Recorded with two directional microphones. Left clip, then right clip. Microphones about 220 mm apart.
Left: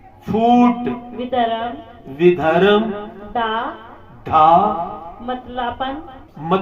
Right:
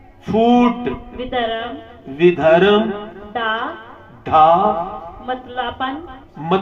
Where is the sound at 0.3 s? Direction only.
25° right (ahead or behind).